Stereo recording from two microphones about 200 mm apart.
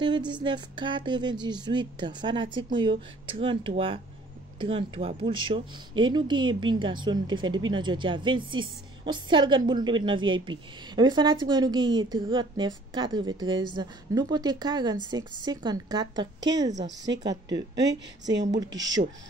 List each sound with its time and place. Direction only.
0.3 s speech: 20° right (ahead or behind)
17.8 s speech: 60° right (ahead or behind)
18.8 s speech: 20° right (ahead or behind)